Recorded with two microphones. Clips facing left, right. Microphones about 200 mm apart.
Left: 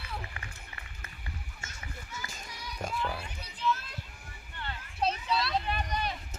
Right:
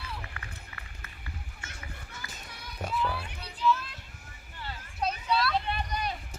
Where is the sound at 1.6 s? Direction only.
60° right (ahead or behind).